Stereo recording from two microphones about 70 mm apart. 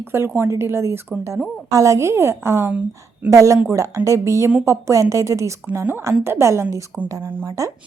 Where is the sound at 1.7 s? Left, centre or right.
Right.